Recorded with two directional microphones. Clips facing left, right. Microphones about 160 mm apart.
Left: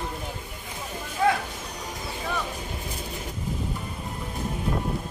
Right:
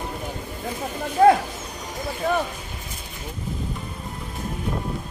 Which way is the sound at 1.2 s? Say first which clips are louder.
Right 9 dB; 45° right (ahead or behind).